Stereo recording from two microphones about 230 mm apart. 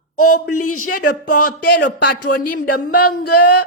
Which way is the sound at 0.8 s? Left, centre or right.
Left.